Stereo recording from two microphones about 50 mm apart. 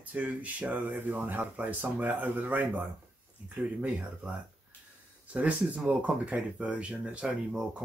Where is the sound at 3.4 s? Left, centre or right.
Right.